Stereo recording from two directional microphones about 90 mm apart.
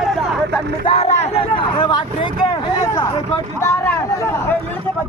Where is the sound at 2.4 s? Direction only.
55° left (ahead or behind).